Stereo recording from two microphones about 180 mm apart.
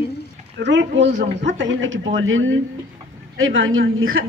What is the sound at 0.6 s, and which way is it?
A woman's voice, 80° right.